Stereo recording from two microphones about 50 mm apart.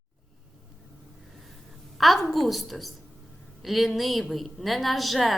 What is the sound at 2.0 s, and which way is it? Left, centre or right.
A woman's voice, centre.